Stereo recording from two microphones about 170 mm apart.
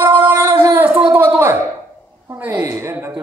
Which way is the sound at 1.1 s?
10° right (ahead or behind).